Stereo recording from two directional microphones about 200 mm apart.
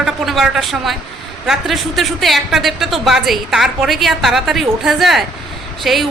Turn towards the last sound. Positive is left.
turn(degrees=0)  # may be behind; listen again after turning